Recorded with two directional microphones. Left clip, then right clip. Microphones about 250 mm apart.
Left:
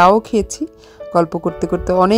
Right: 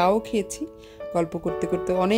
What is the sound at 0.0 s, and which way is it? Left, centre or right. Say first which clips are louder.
Speech: left 10 dB; left.